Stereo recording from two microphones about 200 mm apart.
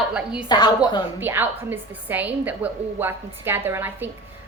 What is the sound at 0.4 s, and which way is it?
Speech, 20° left (ahead or behind).